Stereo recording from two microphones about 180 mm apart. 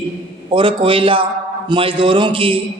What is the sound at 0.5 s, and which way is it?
A man's voice, 30° right (ahead or behind).